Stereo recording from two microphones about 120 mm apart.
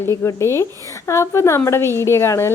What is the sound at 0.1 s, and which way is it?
A woman's voice, 25° left (ahead or behind).